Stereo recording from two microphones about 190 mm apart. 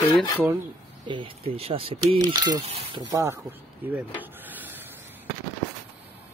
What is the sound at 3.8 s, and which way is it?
Speech, 10° right (ahead or behind).